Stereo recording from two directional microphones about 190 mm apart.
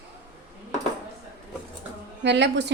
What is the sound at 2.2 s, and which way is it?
Speech, 65° right (ahead or behind).